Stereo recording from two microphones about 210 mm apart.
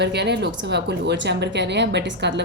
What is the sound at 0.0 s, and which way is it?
A woman's voice, 55° right (ahead or behind).